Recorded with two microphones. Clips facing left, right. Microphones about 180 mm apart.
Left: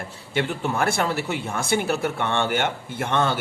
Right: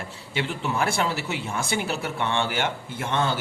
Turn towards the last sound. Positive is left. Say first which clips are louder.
# left 3 dB
turn(degrees=60)  # may be behind; listen again after turning